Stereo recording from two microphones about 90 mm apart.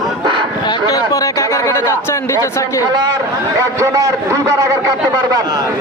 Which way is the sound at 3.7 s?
35° right (ahead or behind).